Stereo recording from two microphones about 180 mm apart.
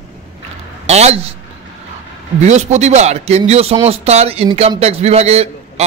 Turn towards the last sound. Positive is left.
turn(degrees=-35)  # may be behind; listen again after turning